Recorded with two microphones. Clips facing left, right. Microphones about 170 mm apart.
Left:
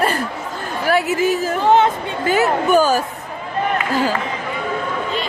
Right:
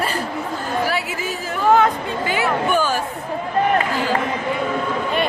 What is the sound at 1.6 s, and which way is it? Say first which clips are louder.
Speech: left 1 dB; 25° left (ahead or behind).